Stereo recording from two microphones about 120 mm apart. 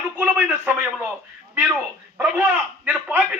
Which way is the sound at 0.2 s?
10° right (ahead or behind).